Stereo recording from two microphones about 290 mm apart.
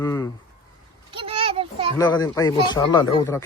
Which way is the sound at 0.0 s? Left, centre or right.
Centre.